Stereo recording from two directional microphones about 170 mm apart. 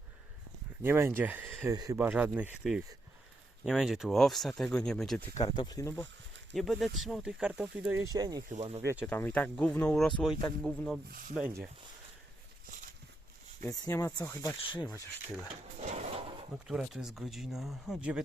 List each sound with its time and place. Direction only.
0.8 s speech: 15° right (ahead or behind)
1.7 s speech: 25° right (ahead or behind)
2.0 s speech: 10° right (ahead or behind)
5.4 s speech: 25° left (ahead or behind)
6.5 s speech: centre (ahead or behind)
8.1 s speech: 25° right (ahead or behind)
8.5 s speech: 40° right (ahead or behind)
8.8 s speech: 15° right (ahead or behind)
9.0 s speech: 10° left (ahead or behind)
11.1 s speech: 55° right (ahead or behind)
13.6 s speech: 20° left (ahead or behind)
15.8 s drawer open or close: 40° right (ahead or behind)
16.6 s speech: centre (ahead or behind)